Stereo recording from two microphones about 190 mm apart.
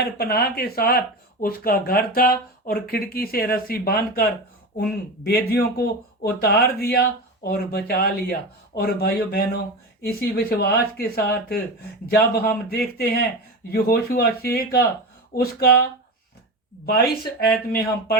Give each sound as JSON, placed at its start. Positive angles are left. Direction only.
{"t": 0.0, "sound": "speech", "side_deg": 55}